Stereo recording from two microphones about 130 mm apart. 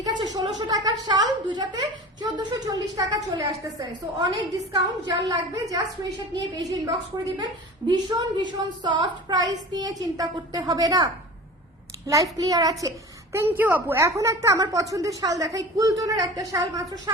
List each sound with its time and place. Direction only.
0.0 s a sound: 30° right (ahead or behind)
0.7 s a woman's voice: 30° right (ahead or behind)
7.8 s a woman's voice: 35° right (ahead or behind)